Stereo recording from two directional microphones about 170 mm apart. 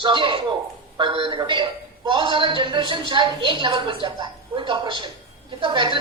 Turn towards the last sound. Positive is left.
turn(degrees=-30)  # may be behind; listen again after turning